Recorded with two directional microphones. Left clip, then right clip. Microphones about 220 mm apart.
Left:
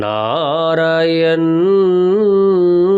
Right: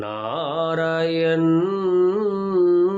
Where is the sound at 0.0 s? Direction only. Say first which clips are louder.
Left 10 dB; 45° left (ahead or behind).